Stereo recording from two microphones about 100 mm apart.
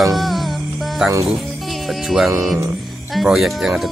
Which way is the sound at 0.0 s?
Centre (ahead or behind).